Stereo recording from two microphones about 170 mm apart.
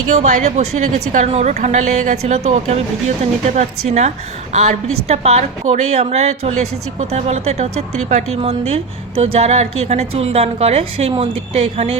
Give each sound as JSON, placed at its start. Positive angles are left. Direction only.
{"t": 0.1, "sound": "a woman's voice", "side_deg": -40}